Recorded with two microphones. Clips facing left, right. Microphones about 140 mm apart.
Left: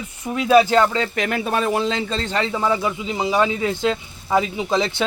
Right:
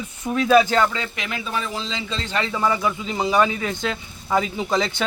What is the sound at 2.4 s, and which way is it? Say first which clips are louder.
Speech: right 1 dB; 20° left (ahead or behind).